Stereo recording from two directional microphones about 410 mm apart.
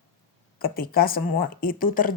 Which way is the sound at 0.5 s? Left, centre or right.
Left.